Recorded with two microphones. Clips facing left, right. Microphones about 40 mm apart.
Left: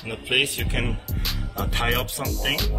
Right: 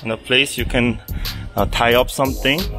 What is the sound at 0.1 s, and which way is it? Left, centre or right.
Speech, right.